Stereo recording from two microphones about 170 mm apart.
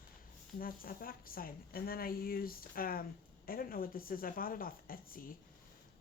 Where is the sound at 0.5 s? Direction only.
60° left (ahead or behind).